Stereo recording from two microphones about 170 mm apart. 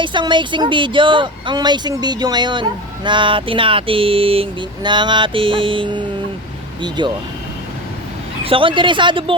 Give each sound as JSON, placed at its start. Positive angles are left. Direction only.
{"t": 0.0, "sound": "speech", "side_deg": -30}
{"t": 8.4, "sound": "speech", "side_deg": -30}